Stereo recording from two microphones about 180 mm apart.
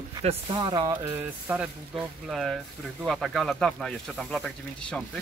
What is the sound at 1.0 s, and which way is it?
Speech, 10° right (ahead or behind).